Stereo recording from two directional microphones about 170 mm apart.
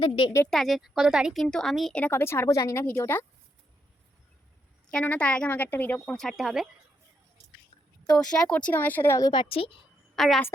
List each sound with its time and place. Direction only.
0.5 s speech: centre (ahead or behind)
4.9 s speech: 5° left (ahead or behind)
8.2 s speech: 5° left (ahead or behind); by 9.7 s 35° left (ahead or behind)
10.2 s speech: centre (ahead or behind)